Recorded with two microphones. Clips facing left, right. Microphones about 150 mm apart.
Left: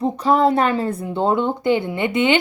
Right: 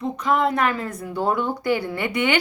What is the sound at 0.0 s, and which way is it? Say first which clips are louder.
A woman's voice: left 5 dB; 30° left (ahead or behind).